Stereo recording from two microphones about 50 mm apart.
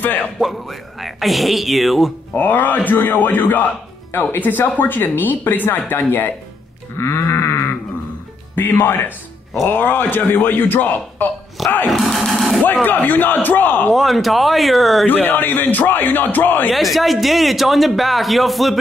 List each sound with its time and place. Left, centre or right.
0.0 s a man's voice: left
0.4 s speech: centre
2.3 s a man's voice: left
7.0 s sheep: left
8.5 s a man's voice: left
11.6 s speech: centre
12.8 s a man's voice: left
13.9 s speech: centre
15.0 s a man's voice: left
16.7 s speech: centre